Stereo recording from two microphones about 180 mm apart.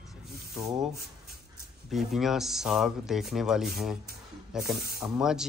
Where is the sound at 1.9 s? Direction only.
Centre (ahead or behind).